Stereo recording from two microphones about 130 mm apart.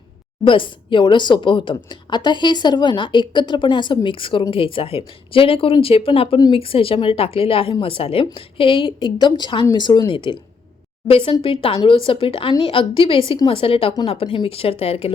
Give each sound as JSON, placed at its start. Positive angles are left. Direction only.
{"t": 0.4, "sound": "a woman's voice", "side_deg": 40}
{"t": 11.9, "sound": "a woman's voice", "side_deg": 40}